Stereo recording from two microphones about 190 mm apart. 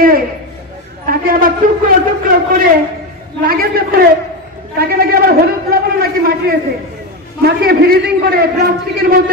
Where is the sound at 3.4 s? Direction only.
50° right (ahead or behind).